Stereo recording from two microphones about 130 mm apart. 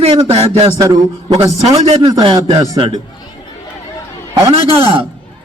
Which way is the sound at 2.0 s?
35° right (ahead or behind).